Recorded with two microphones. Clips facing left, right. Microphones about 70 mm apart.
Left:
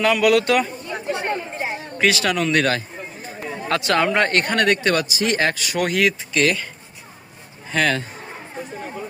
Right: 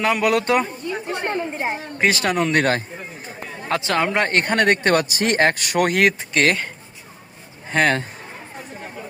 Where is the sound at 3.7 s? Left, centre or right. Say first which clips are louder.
Left 1 dB; right.